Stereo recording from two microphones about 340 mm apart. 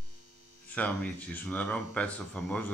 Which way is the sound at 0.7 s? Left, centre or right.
Centre.